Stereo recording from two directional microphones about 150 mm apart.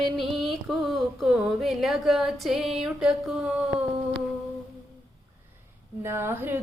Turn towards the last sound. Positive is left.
turn(degrees=-15)  # may be behind; listen again after turning